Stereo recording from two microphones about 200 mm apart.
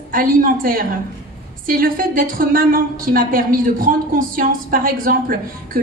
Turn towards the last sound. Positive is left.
turn(degrees=-45)  # may be behind; listen again after turning